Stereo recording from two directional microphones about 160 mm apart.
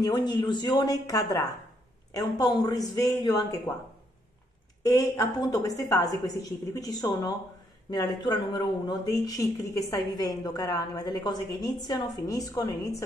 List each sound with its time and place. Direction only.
0.0 s speech: 25° left (ahead or behind)
4.8 s speech: 25° left (ahead or behind)